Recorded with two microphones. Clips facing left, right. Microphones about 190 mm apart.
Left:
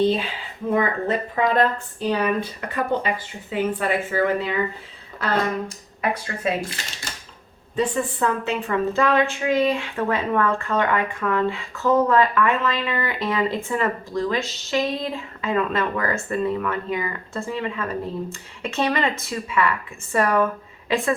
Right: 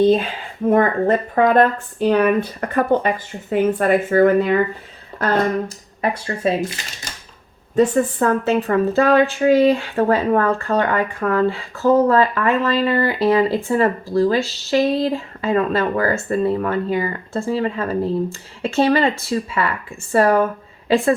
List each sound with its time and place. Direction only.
0.0 s speech: 45° right (ahead or behind)
6.0 s speech: 30° right (ahead or behind)
7.8 s speech: 45° right (ahead or behind)